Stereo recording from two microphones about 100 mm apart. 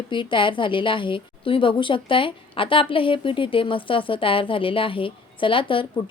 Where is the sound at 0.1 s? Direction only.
55° left (ahead or behind).